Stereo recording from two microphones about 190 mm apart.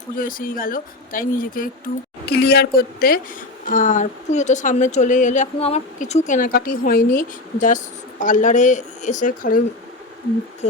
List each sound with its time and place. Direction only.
0.2 s a woman's voice: 45° left (ahead or behind)